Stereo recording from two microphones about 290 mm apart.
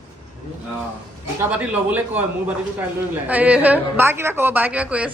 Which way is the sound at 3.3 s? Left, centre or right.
Centre.